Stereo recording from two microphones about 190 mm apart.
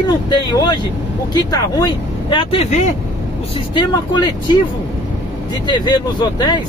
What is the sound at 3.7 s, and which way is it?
Speech, 25° left (ahead or behind).